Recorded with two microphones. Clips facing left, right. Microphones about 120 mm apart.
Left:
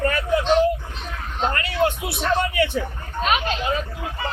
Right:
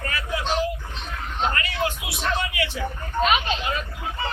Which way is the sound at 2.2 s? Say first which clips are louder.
Left 5 dB; 50° left (ahead or behind).